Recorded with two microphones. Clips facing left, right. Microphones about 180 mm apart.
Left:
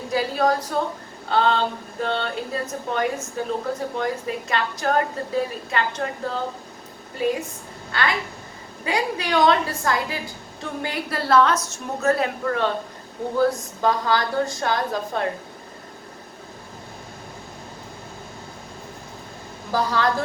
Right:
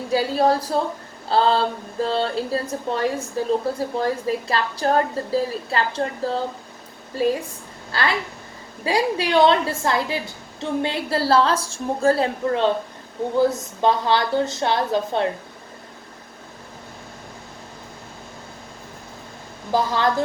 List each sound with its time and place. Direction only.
0.1 s speech: 30° right (ahead or behind)
7.9 s a woman's voice: 30° right (ahead or behind)
19.7 s a woman's voice: 25° right (ahead or behind)